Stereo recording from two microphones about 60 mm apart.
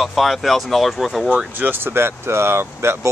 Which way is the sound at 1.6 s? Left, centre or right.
Right.